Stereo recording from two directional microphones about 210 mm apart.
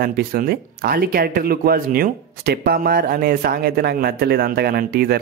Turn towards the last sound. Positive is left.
turn(degrees=-50)  # may be behind; listen again after turning